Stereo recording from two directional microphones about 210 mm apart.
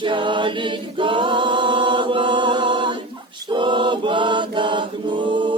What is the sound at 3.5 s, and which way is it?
Mantra, 25° right (ahead or behind).